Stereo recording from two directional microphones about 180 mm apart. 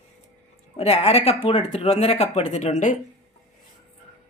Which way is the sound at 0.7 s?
35° left (ahead or behind).